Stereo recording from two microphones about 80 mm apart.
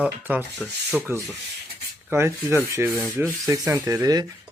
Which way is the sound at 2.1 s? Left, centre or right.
Right.